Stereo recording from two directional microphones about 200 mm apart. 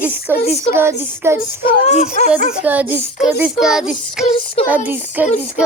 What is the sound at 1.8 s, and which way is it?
Speech, 35° left (ahead or behind).